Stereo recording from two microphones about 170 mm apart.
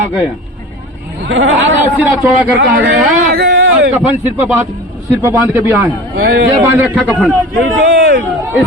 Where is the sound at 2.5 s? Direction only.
70° right (ahead or behind).